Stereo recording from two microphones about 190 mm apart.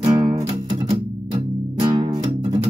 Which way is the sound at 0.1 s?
20° right (ahead or behind).